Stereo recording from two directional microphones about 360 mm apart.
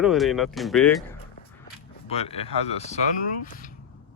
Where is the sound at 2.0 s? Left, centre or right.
Centre.